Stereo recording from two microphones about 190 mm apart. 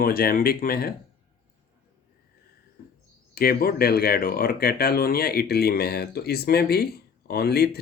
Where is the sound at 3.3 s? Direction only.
55° left (ahead or behind).